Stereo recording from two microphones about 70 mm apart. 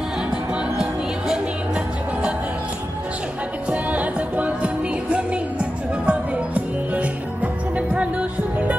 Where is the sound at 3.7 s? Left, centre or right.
Right.